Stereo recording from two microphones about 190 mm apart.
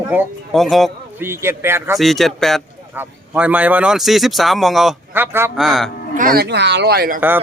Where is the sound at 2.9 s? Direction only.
10° right (ahead or behind).